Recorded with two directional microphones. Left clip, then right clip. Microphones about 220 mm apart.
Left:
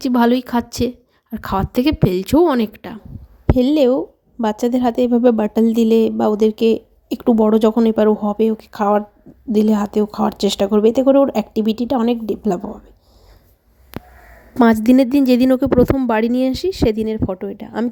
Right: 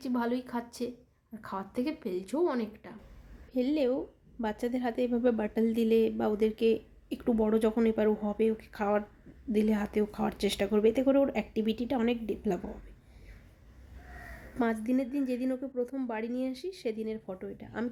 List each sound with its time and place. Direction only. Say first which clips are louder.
0.0 s a woman's voice: left 17 dB; 40° left (ahead or behind); by 12.8 s 25° left (ahead or behind)
14.5 s a woman's voice: left 18 dB; 40° left (ahead or behind)